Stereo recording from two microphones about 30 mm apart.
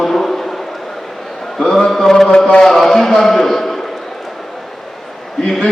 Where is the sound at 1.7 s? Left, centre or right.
Centre.